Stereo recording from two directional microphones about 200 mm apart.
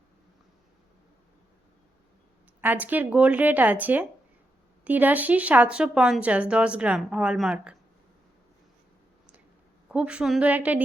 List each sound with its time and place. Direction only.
2.6 s speech: 10° right (ahead or behind)
9.9 s speech: 5° right (ahead or behind)